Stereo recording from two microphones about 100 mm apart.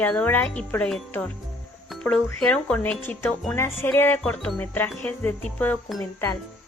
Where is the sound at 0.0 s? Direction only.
15° left (ahead or behind).